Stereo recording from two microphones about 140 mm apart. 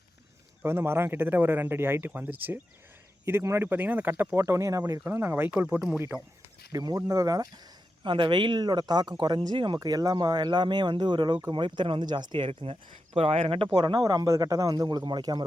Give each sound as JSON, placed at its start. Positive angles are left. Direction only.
{"t": 0.6, "sound": "speech", "side_deg": -15}
{"t": 6.7, "sound": "a man's voice", "side_deg": -25}
{"t": 13.7, "sound": "a man's voice", "side_deg": -30}